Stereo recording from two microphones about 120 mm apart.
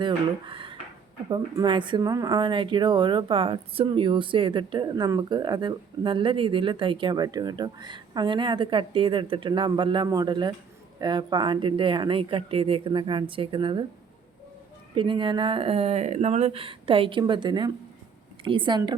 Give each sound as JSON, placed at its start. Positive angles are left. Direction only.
{"t": 0.0, "sound": "speech", "side_deg": -45}
{"t": 14.9, "sound": "speech", "side_deg": -45}